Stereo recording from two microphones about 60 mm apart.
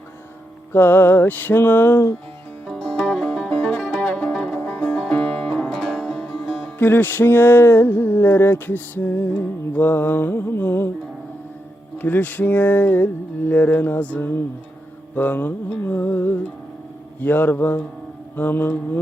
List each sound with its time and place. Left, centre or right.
0.7 s music: left
2.6 s music: centre
4.5 s music: left; by 6.2 s centre
6.7 s music: left
12.0 s a sound: left
15.1 s music: left